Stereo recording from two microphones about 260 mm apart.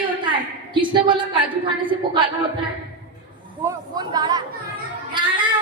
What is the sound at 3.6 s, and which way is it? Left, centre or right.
Speech, centre.